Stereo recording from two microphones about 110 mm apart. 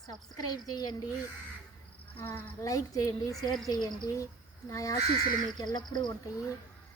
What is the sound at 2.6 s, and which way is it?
Speech, 30° left (ahead or behind).